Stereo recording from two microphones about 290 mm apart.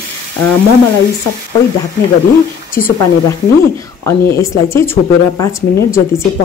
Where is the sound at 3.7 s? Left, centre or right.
Centre.